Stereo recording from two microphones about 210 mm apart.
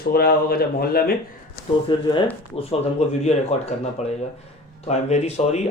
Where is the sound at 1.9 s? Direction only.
20° left (ahead or behind).